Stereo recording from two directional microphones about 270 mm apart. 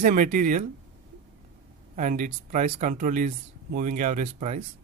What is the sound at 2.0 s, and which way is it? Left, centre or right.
Speech, right.